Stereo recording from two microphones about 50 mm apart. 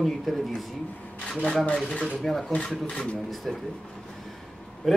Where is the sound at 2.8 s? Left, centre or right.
Left.